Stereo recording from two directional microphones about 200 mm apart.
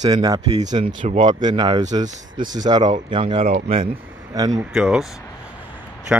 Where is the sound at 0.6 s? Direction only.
35° right (ahead or behind).